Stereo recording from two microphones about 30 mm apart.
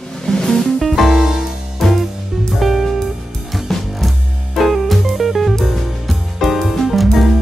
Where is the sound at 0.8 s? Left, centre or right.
Centre.